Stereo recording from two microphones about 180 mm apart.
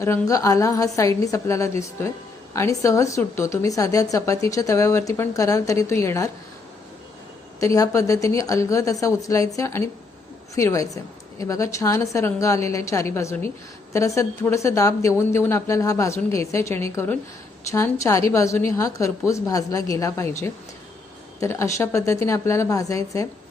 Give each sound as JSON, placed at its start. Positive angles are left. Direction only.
{"t": 0.0, "sound": "a woman's voice", "side_deg": 15}
{"t": 7.6, "sound": "a woman's voice", "side_deg": 20}